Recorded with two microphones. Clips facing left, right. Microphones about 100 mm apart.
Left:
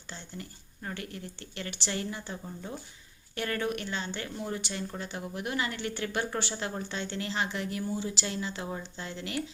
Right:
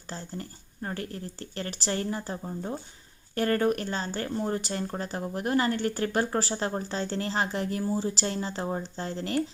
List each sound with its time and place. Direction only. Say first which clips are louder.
0.1 s speech: right 5 dB; 40° right (ahead or behind)